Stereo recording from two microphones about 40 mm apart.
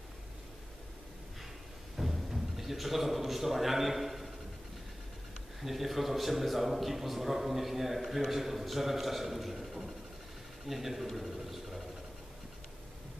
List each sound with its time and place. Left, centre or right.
2.0 s a man's voice: centre
5.6 s a man's voice: centre